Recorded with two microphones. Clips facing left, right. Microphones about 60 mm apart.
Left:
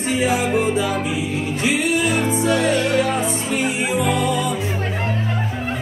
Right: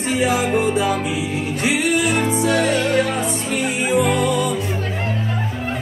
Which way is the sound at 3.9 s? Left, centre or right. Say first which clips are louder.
Right 4 dB; right.